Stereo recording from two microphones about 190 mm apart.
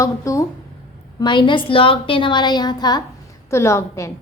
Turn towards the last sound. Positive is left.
turn(degrees=15)  # may be behind; listen again after turning